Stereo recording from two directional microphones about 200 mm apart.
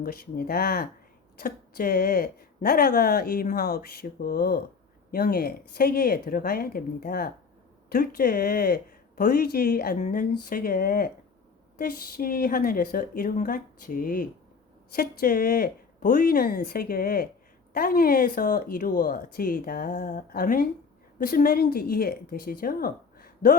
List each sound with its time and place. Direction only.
0.0 s speech: 45° left (ahead or behind)